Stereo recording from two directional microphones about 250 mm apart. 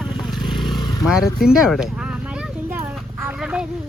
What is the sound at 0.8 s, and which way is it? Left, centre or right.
Motorcycle, centre.